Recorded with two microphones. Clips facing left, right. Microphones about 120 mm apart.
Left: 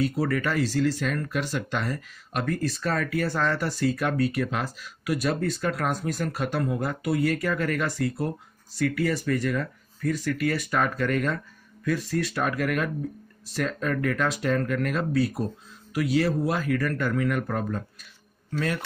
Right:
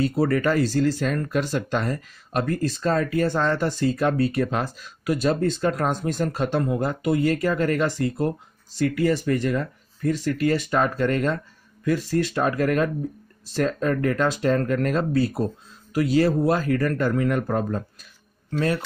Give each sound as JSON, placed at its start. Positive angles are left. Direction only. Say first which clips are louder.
{"t": 0.0, "sound": "speech", "louder": "right 4 dB", "side_deg": -30}
{"t": 2.5, "sound": "speech", "louder": "right 4 dB", "side_deg": -25}